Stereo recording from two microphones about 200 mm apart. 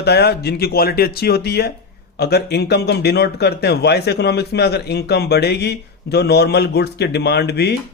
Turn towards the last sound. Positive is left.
turn(degrees=55)  # may be behind; listen again after turning